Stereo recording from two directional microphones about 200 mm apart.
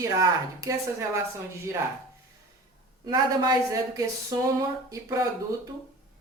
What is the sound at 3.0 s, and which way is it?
A woman's voice, 20° right (ahead or behind).